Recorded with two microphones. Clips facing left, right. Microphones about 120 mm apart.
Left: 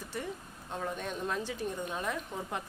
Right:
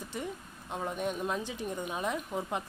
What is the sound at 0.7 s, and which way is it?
A woman's voice, 15° right (ahead or behind).